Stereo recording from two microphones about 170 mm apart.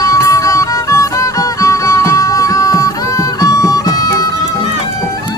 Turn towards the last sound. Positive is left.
turn(degrees=20)  # may be behind; listen again after turning